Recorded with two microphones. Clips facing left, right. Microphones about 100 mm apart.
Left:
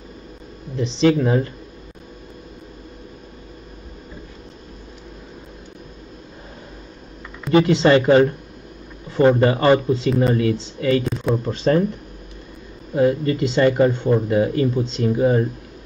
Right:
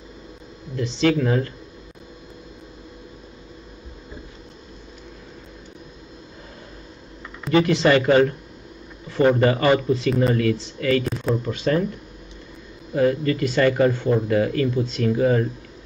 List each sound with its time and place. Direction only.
0.7 s speech: 20° left (ahead or behind)
7.5 s speech: 25° left (ahead or behind)
12.9 s speech: 25° left (ahead or behind)